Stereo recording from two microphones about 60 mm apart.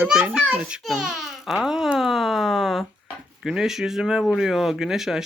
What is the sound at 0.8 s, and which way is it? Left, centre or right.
A child's voice, centre.